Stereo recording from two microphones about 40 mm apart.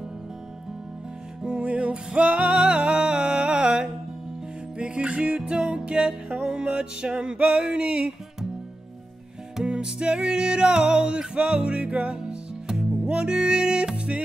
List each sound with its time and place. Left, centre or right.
1.4 s music: right
9.7 s music: right